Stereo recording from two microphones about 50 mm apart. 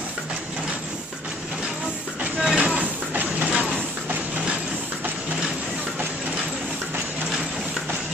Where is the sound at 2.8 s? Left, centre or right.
Right.